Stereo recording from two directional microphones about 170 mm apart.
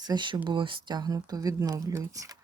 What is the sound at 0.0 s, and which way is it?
Speech, 25° right (ahead or behind).